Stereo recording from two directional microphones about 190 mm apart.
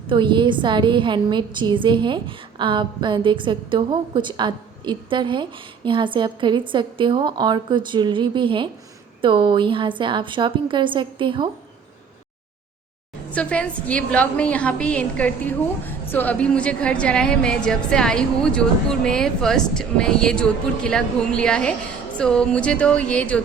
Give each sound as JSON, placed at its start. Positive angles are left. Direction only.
{"t": 0.1, "sound": "a woman's voice", "side_deg": -25}
{"t": 13.3, "sound": "a woman's voice", "side_deg": 5}